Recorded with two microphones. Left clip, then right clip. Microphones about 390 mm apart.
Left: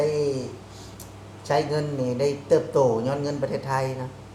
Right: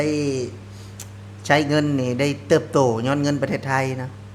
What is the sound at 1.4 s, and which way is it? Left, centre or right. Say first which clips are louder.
Speech: right 5 dB; right.